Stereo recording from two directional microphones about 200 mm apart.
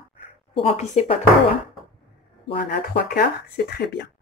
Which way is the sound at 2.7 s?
45° left (ahead or behind).